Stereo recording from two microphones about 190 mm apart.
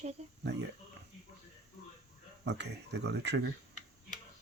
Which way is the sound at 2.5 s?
65° right (ahead or behind).